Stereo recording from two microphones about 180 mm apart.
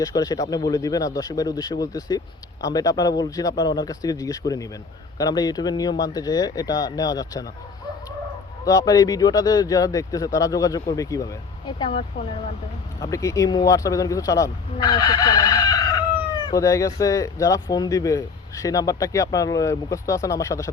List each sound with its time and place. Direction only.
0.0 s speech: 20° left (ahead or behind)
8.6 s speech: 20° left (ahead or behind)
13.0 s speech: 20° left (ahead or behind)